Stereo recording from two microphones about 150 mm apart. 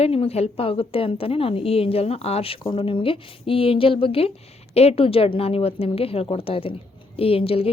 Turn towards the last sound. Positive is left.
turn(degrees=40)  # may be behind; listen again after turning